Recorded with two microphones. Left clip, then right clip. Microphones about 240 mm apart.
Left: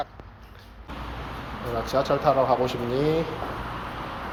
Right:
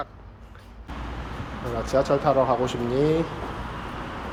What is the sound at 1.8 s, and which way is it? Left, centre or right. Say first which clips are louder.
A man's voice: right 1 dB; centre.